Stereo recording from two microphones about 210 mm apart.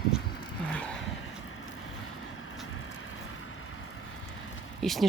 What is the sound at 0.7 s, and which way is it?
Vehicle, 5° left (ahead or behind).